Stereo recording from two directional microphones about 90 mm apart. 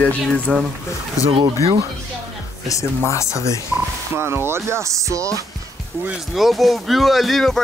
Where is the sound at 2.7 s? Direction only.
35° left (ahead or behind).